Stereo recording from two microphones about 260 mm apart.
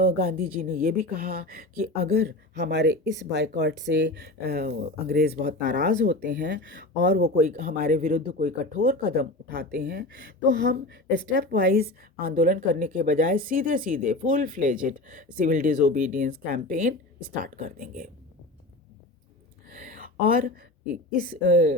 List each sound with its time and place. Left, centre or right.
0.0 s speech: right
19.7 s a sound: right
21.2 s speech: right